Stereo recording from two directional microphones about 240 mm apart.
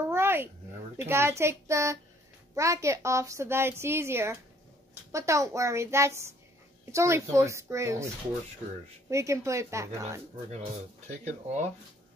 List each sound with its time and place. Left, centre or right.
0.1 s a sound: centre
0.9 s a woman's voice: centre
9.1 s a woman's voice: centre
11.1 s speech: right